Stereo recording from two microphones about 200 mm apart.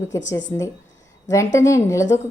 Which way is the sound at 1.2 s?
15° left (ahead or behind).